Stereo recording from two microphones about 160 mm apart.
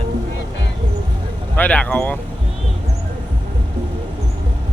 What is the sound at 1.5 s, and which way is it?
Speech, 10° left (ahead or behind).